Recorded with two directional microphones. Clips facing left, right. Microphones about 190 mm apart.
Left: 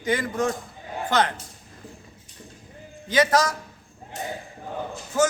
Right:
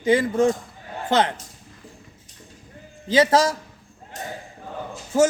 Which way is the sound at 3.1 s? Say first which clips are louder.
Right 3 dB; 30° right (ahead or behind).